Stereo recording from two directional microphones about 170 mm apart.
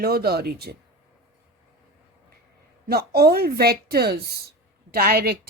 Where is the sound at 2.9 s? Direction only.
65° right (ahead or behind).